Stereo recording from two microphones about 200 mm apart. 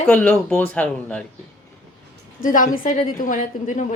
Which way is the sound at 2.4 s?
40° left (ahead or behind).